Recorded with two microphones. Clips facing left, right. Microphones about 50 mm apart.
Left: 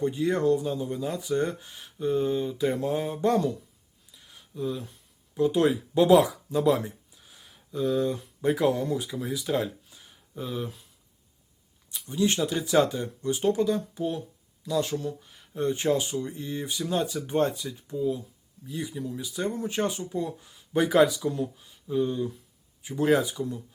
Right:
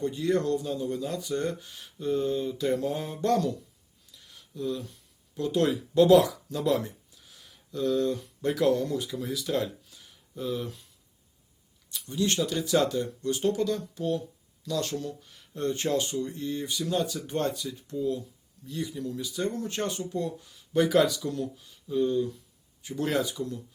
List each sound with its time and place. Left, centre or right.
0.0 s speech: centre
4.1 s a sound: centre
5.3 s speech: centre
11.9 s speech: centre